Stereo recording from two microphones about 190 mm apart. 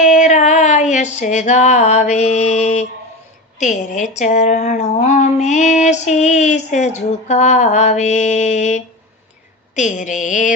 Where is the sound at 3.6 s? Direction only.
40° left (ahead or behind).